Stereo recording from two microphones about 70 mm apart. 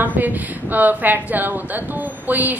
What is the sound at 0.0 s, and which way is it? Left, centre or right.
A woman's voice, right.